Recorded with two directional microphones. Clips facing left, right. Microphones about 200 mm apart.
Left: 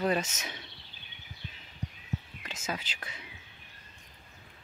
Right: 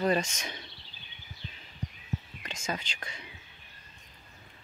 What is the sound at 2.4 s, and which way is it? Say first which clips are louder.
Speech: right 1 dB; 5° left (ahead or behind).